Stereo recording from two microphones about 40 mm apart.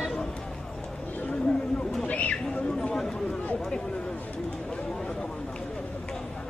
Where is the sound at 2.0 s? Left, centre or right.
Left.